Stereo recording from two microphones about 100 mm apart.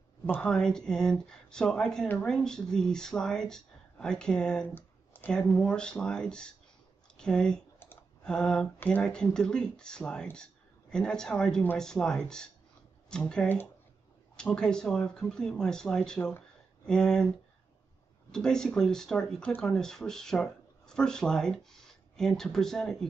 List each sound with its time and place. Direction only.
0.4 s speech: 5° left (ahead or behind)
4.7 s a sound: 20° left (ahead or behind)
5.3 s speech: 10° left (ahead or behind)
18.3 s speech: 5° left (ahead or behind)